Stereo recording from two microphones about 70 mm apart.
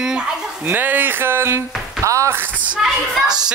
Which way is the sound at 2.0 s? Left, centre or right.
Right.